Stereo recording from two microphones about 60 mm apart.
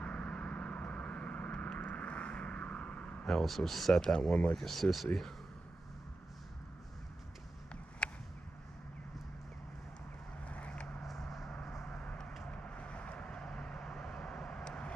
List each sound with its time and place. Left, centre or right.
0.0 s vehicle: centre
3.3 s speech: centre
8.0 s a sound: centre
10.5 s vehicle: left
11.1 s a sound: centre
11.6 s vehicle: centre
12.0 s vehicle: centre